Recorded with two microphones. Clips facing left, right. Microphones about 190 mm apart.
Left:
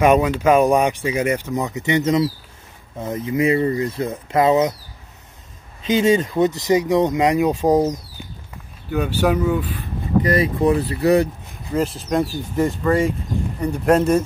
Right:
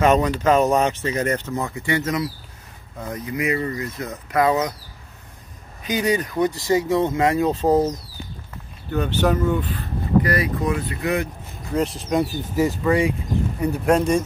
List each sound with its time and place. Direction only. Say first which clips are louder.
0.0 s speech: left 2 dB; 10° left (ahead or behind)
5.8 s speech: left 5 dB; 25° left (ahead or behind)
8.9 s speech: left 2 dB; 10° left (ahead or behind)
10.2 s speech: left 5 dB; 25° left (ahead or behind)
11.7 s speech: left 1 dB; centre (ahead or behind)